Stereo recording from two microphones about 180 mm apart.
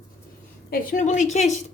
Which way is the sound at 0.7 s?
50° left (ahead or behind).